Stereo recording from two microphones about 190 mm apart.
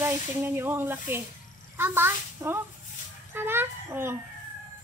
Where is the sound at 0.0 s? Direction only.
10° right (ahead or behind).